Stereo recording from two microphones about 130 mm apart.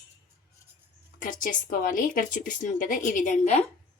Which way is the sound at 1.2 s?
90° left.